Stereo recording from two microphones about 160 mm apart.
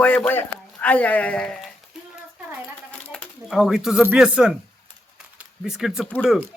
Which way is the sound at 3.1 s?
5° left (ahead or behind).